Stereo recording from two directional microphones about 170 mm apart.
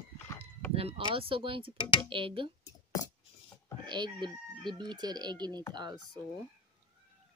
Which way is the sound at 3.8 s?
25° right (ahead or behind).